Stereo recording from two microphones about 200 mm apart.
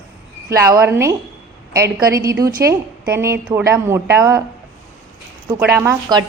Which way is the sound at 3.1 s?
15° right (ahead or behind).